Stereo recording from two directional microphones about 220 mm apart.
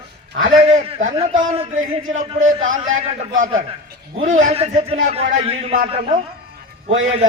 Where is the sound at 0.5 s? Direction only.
25° right (ahead or behind).